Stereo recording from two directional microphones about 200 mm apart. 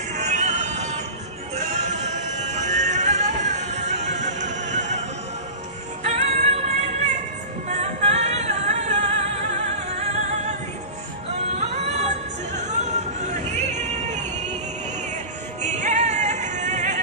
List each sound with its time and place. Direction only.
0.1 s music: 35° right (ahead or behind)
6.0 s music: 35° right (ahead or behind)
7.6 s music: 35° right (ahead or behind)
11.6 s music: 35° right (ahead or behind)
15.6 s music: 35° right (ahead or behind)